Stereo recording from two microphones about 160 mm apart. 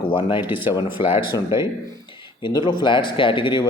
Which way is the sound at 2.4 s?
30° left (ahead or behind).